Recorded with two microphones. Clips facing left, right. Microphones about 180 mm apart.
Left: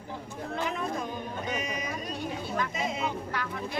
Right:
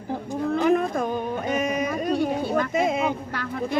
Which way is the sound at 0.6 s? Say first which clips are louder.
Right 10 dB; 55° right (ahead or behind).